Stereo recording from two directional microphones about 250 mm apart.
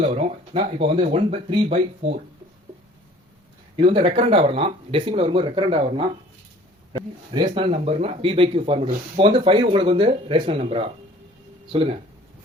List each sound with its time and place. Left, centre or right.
0.2 s speech: right
3.8 s speech: right
7.4 s speech: right